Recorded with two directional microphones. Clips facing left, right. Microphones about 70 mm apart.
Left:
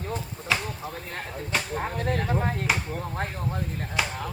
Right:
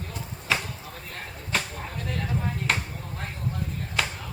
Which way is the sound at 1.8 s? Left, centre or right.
Left.